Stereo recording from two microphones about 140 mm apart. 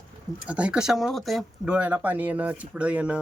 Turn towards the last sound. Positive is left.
turn(degrees=-10)  # may be behind; listen again after turning